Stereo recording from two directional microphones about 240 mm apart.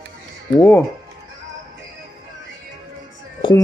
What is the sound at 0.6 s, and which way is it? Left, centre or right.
Speech, centre.